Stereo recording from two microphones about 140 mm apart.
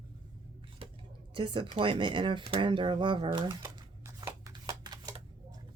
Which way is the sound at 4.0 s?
25° right (ahead or behind).